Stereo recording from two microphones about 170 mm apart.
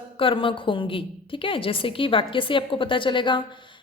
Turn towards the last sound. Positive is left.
turn(degrees=30)  # may be behind; listen again after turning